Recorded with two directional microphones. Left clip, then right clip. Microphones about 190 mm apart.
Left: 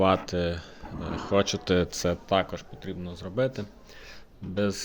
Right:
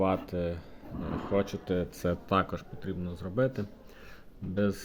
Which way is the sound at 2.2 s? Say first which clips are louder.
Left 2 dB; 25° right (ahead or behind).